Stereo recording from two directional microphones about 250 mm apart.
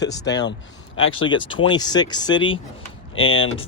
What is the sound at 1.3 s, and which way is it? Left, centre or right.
Speech, centre.